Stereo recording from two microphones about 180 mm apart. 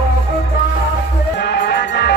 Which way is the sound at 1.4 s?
70° left (ahead or behind).